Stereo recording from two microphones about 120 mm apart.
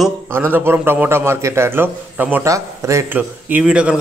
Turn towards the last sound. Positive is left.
turn(degrees=-10)  # may be behind; listen again after turning